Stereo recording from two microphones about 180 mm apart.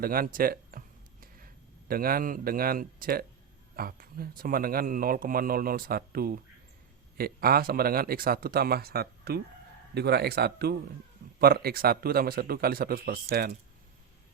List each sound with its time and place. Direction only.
0.0 s speech: 55° right (ahead or behind)
1.9 s speech: 55° right (ahead or behind)